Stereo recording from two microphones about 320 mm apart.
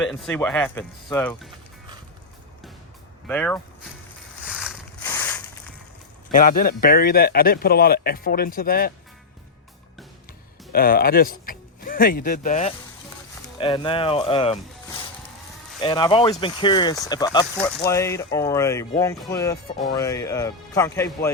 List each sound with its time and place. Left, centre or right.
0.0 s speech: centre
3.2 s speech: centre
4.4 s ratchet: centre
6.3 s speech: left
10.7 s speech: left
15.8 s speech: centre